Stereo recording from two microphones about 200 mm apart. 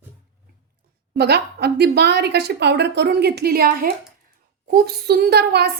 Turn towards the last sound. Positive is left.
turn(degrees=-55)  # may be behind; listen again after turning